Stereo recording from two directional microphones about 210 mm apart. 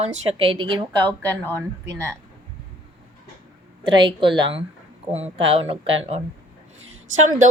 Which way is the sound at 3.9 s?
20° right (ahead or behind).